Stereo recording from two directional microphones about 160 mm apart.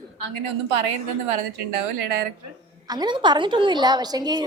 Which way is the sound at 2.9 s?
25° right (ahead or behind).